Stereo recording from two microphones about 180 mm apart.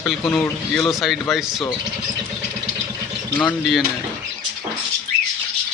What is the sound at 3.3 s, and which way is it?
Speech, 5° left (ahead or behind).